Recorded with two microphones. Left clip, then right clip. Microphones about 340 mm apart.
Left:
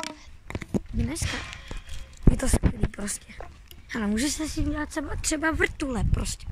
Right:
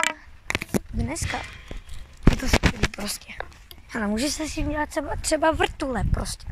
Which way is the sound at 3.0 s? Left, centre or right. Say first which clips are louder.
Right 5 dB; centre.